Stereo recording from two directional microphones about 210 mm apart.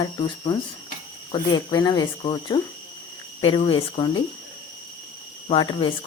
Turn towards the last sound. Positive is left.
turn(degrees=20)  # may be behind; listen again after turning